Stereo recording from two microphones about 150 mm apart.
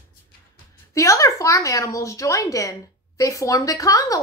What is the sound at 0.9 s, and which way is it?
Speech, 20° left (ahead or behind).